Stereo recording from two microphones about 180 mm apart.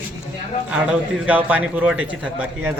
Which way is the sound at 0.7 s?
5° right (ahead or behind).